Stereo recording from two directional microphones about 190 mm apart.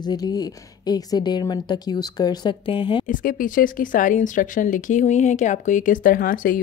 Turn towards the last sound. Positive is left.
turn(degrees=45)  # may be behind; listen again after turning